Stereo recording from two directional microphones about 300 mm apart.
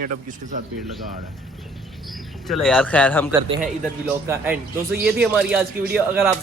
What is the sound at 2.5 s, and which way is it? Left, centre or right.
Speech, centre.